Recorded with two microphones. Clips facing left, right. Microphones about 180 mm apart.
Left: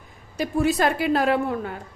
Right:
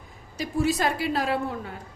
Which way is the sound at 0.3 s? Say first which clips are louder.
Left 3 dB; 55° left (ahead or behind).